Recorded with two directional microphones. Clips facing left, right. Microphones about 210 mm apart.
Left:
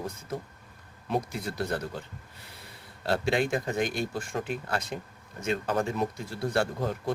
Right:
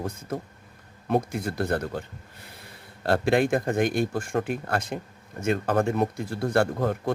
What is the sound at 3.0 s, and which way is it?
Speech, 55° right (ahead or behind).